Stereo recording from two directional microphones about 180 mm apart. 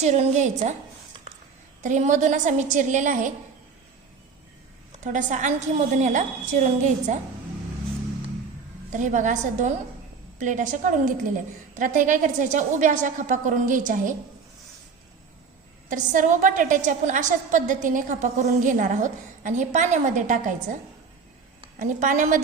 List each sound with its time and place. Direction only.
0.0 s a woman's voice: 40° right (ahead or behind)
1.8 s a woman's voice: 45° right (ahead or behind)
5.0 s a woman's voice: 45° right (ahead or behind)
8.9 s a woman's voice: 45° right (ahead or behind)
15.9 s a woman's voice: 45° right (ahead or behind)
21.8 s a woman's voice: 45° right (ahead or behind)